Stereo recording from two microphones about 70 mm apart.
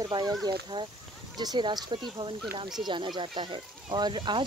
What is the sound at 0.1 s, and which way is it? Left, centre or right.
Speech, right.